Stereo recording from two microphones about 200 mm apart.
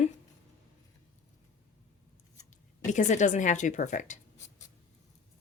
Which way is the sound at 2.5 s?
40° left (ahead or behind).